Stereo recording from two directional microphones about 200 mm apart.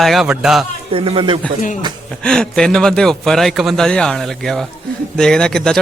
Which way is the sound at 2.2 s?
5° left (ahead or behind).